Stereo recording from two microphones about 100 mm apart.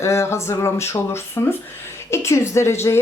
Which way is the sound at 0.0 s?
30° left (ahead or behind).